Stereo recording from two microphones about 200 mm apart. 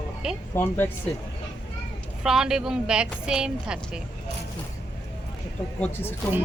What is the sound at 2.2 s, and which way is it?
Speech, 5° right (ahead or behind).